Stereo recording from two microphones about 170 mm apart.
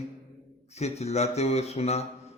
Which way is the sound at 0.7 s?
40° left (ahead or behind).